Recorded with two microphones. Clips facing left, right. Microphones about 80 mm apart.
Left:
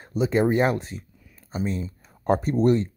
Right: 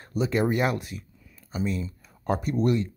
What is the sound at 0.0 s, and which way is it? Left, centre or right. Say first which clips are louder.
Speech: left 3 dB; left.